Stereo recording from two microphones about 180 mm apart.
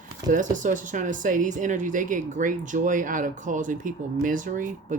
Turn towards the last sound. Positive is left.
turn(degrees=-45)  # may be behind; listen again after turning